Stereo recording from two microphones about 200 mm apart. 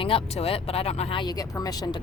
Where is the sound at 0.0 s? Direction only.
30° left (ahead or behind).